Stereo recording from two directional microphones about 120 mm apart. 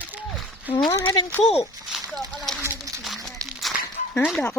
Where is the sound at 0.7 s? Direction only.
35° left (ahead or behind).